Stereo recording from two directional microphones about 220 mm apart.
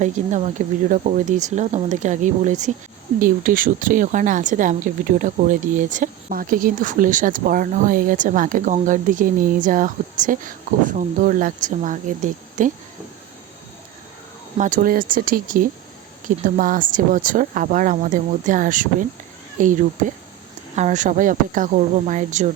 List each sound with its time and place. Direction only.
0.0 s a woman's voice: 35° right (ahead or behind)
14.6 s a woman's voice: 40° right (ahead or behind)